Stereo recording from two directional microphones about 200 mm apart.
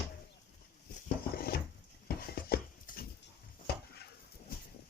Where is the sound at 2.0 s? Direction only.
50° left (ahead or behind).